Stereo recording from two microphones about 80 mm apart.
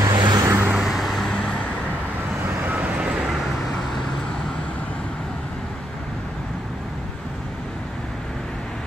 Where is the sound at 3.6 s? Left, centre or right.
Centre.